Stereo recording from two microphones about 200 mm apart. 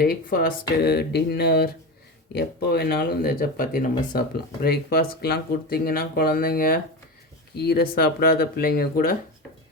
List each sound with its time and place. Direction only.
0.0 s speech: 45° left (ahead or behind)